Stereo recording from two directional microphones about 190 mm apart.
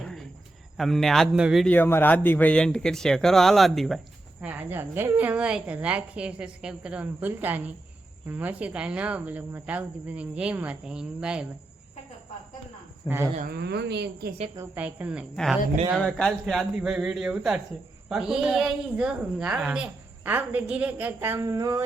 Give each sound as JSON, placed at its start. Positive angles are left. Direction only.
{"t": 0.0, "sound": "cricket", "side_deg": 0}
{"t": 0.8, "sound": "speech", "side_deg": 0}
{"t": 1.7, "sound": "speech", "side_deg": 10}
{"t": 13.0, "sound": "speech", "side_deg": 25}
{"t": 13.5, "sound": "a woman's voice", "side_deg": -60}
{"t": 14.5, "sound": "speech", "side_deg": -10}